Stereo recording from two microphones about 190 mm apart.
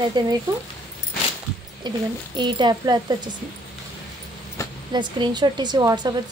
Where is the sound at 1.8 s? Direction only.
25° right (ahead or behind).